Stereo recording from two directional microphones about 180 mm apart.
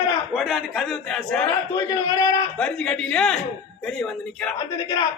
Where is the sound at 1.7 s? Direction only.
20° left (ahead or behind).